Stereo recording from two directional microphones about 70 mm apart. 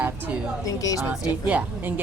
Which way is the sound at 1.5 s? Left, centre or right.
Right.